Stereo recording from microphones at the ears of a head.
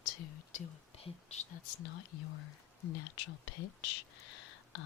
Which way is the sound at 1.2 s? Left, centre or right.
Left.